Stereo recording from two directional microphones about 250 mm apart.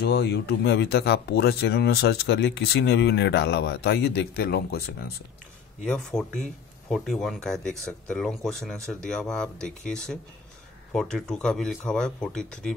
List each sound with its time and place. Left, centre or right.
0.0 s speech: left
5.9 s speech: centre